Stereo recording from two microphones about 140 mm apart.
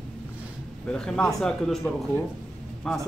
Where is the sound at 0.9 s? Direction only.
5° left (ahead or behind).